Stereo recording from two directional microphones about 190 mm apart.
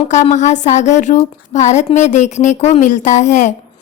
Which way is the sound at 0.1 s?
40° left (ahead or behind).